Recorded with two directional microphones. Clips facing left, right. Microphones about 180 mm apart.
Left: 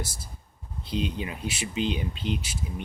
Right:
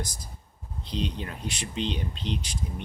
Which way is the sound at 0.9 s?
5° left (ahead or behind).